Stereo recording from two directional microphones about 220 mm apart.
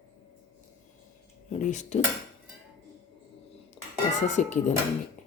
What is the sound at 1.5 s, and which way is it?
Speech, 30° left (ahead or behind).